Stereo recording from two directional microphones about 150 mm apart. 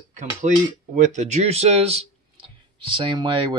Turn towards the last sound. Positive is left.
turn(degrees=-35)  # may be behind; listen again after turning